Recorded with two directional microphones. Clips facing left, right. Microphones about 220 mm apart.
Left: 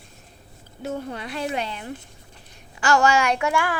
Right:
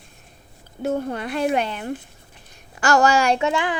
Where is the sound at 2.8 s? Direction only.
40° right (ahead or behind); by 3.7 s 20° right (ahead or behind).